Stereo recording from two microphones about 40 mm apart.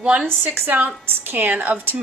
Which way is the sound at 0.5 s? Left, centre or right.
Right.